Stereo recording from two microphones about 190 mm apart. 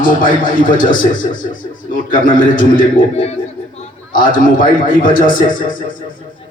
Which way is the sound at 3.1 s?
35° left (ahead or behind).